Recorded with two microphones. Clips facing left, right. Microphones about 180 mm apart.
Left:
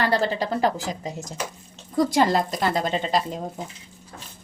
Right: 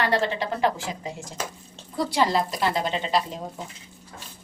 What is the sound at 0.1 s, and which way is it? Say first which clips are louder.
A woman's voice: left 2 dB; 35° left (ahead or behind).